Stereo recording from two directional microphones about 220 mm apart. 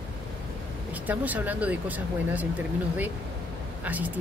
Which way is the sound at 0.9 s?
5° right (ahead or behind).